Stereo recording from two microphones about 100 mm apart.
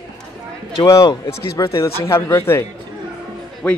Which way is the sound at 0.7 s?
35° left (ahead or behind).